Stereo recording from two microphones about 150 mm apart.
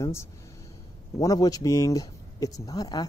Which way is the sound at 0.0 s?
20° left (ahead or behind).